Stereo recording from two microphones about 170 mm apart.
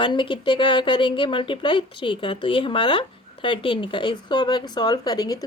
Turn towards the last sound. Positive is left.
turn(degrees=20)  # may be behind; listen again after turning